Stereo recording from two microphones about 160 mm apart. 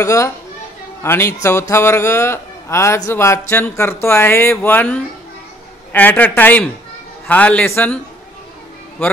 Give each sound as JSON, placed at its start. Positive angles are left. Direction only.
{"t": 0.0, "sound": "a man's voice", "side_deg": 20}